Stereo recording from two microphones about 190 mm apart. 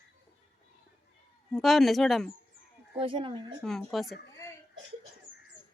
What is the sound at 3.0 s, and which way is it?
Speech, 25° right (ahead or behind).